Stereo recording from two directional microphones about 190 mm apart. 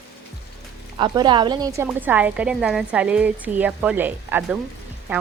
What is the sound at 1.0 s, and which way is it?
A woman's voice, 25° right (ahead or behind).